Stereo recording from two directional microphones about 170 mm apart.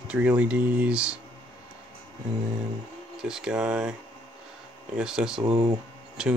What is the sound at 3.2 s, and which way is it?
Speech, 5° right (ahead or behind).